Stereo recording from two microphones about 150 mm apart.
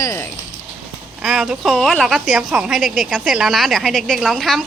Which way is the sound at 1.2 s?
Centre (ahead or behind).